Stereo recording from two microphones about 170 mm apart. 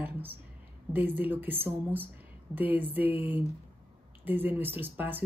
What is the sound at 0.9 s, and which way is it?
Speech, 10° right (ahead or behind).